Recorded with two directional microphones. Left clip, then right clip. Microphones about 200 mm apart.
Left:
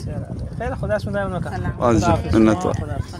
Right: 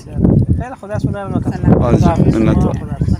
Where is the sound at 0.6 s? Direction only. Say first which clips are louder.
Even; 25° left (ahead or behind).